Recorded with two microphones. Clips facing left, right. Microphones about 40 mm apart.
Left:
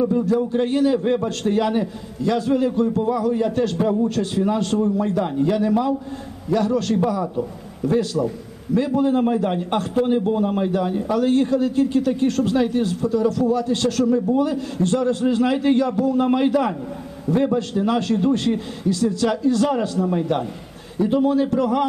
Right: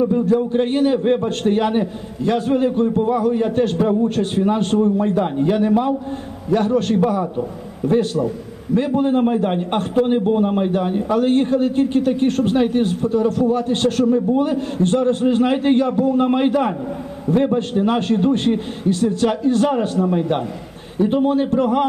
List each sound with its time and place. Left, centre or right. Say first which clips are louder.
0.5 s a man's voice: right 2 dB; right
1.0 s a man's voice: right 3 dB; right
1.4 s a man's voice: right 2 dB; right
9.2 s a man's voice: right 2 dB; right